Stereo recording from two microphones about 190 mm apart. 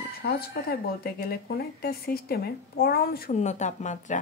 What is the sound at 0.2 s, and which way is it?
Speech, 55° left (ahead or behind).